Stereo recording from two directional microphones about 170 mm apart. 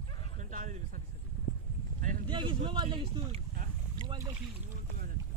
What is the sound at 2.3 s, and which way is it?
A man's voice, 30° right (ahead or behind).